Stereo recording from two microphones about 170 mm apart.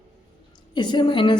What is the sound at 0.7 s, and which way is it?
Speech, 25° left (ahead or behind).